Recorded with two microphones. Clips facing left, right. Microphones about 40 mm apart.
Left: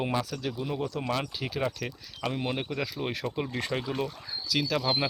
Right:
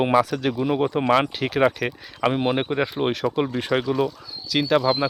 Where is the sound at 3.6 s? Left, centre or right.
Right.